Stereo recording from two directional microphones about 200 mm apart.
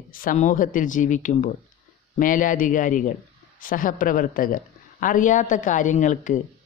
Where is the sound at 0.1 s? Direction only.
45° left (ahead or behind).